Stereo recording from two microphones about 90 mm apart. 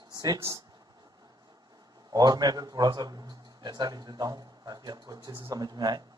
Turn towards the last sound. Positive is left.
turn(degrees=-50)  # may be behind; listen again after turning